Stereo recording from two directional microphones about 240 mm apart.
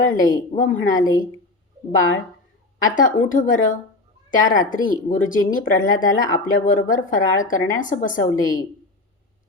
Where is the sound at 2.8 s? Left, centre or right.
Left.